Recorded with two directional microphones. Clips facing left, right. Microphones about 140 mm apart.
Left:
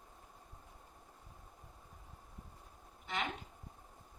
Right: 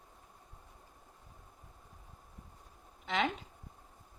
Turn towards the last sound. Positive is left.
turn(degrees=-90)